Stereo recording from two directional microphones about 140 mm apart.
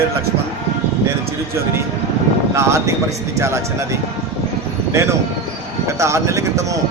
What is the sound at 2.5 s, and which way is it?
Speech, 20° right (ahead or behind).